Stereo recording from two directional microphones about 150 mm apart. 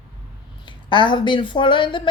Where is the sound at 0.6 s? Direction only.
30° left (ahead or behind).